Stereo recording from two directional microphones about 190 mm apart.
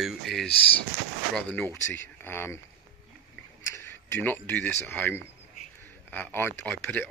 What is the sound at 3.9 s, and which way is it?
Speech, 10° left (ahead or behind).